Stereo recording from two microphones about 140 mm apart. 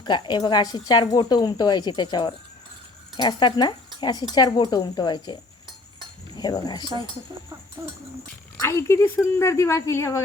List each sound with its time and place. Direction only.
0.0 s speech: 30° left (ahead or behind)
8.5 s speech: 20° left (ahead or behind)